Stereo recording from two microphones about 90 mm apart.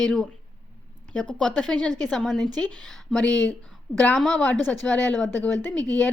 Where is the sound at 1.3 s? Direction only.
10° left (ahead or behind).